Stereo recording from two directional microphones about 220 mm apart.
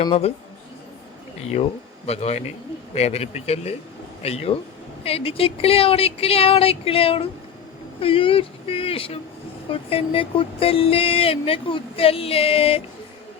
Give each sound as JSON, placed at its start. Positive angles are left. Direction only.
{"t": 0.0, "sound": "speech", "side_deg": 25}
{"t": 2.0, "sound": "speech", "side_deg": 30}